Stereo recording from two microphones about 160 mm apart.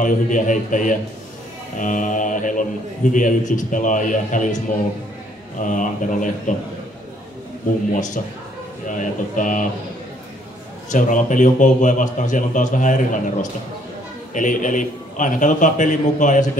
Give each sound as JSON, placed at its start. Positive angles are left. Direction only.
{"t": 0.0, "sound": "a man's voice", "side_deg": 55}
{"t": 5.6, "sound": "a man's voice", "side_deg": 55}
{"t": 8.8, "sound": "a man's voice", "side_deg": 55}
{"t": 10.9, "sound": "a man's voice", "side_deg": 50}